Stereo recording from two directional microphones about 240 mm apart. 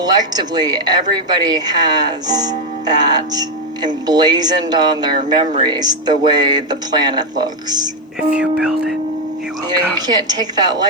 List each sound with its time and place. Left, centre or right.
0.0 s speech: centre
8.6 s speech: centre
10.1 s speech: centre